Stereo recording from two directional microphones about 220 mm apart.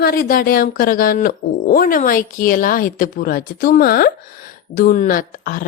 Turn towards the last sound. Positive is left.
turn(degrees=40)  # may be behind; listen again after turning